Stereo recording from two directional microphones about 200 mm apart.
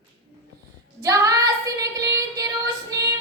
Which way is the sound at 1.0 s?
15° right (ahead or behind).